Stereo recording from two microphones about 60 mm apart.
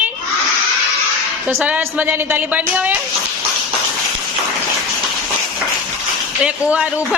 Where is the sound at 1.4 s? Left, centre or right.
Right.